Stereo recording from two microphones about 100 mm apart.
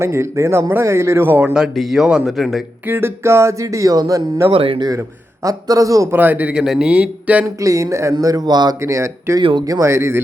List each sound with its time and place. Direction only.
0.0 s a man's voice: 25° right (ahead or behind)
1.5 s speech: 5° right (ahead or behind)
2.8 s speech: 25° right (ahead or behind)
4.5 s speech: 65° right (ahead or behind)
4.9 s a man's voice: 35° right (ahead or behind)
6.1 s speech: 15° right (ahead or behind)
7.4 s speech: 35° right (ahead or behind)
8.8 s speech: 30° right (ahead or behind)
9.4 s speech: 55° right (ahead or behind)
9.6 s a man's voice: 35° right (ahead or behind)